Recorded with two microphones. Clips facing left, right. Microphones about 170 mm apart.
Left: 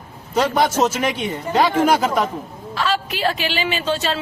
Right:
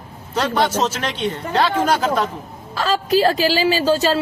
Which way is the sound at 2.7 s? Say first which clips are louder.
Right 5 dB; 40° right (ahead or behind).